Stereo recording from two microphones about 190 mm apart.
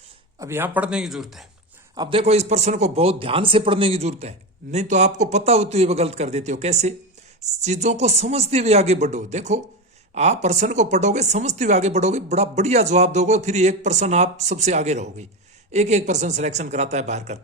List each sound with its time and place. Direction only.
0.3 s speech: 15° right (ahead or behind)
2.0 s a woman's voice: 30° right (ahead or behind)